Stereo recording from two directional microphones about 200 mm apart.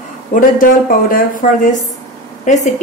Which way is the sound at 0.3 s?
45° left (ahead or behind).